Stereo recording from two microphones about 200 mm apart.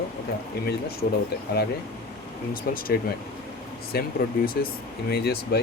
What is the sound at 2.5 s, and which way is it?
Speech, 45° left (ahead or behind).